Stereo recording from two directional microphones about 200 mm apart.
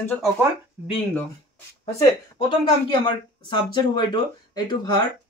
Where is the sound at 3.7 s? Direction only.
20° left (ahead or behind).